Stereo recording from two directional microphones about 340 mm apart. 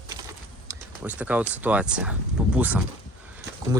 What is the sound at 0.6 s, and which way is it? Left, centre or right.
Speech, centre.